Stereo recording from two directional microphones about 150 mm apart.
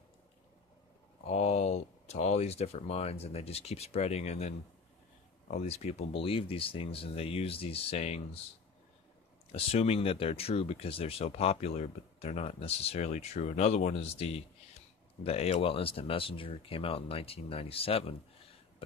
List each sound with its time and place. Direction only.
1.2 s speech: 45° left (ahead or behind)
5.6 s speech: 45° left (ahead or behind)
9.5 s speech: 40° left (ahead or behind)